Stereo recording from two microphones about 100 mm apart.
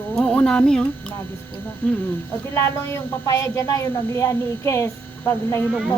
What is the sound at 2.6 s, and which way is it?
Speech, 25° left (ahead or behind).